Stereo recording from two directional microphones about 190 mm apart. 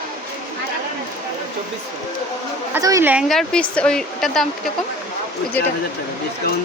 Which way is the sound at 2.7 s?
15° right (ahead or behind).